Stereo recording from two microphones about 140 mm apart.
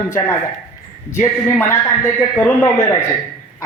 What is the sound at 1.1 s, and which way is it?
Speech, 15° left (ahead or behind).